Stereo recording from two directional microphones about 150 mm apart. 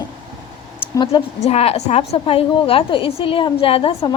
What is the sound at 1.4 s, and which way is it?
A woman's voice, 45° left (ahead or behind).